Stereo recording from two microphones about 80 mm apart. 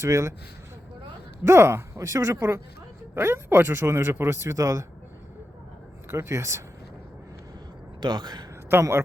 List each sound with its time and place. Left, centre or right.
0.0 s speech: right
1.5 s speech: right
6.1 s speech: right
8.0 s speech: right
8.7 s speech: right